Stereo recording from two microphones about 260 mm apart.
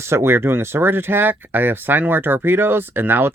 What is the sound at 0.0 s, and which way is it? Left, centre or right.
Speech, centre.